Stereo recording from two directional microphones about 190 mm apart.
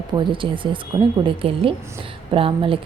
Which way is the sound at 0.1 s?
25° right (ahead or behind).